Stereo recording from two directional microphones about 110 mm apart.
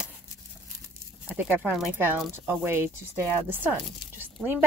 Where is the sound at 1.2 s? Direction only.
15° right (ahead or behind).